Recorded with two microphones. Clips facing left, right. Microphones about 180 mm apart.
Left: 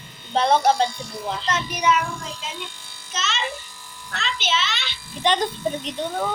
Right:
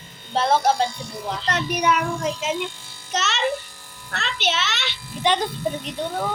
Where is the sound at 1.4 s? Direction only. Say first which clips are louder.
Right 1 dB; 60° right (ahead or behind).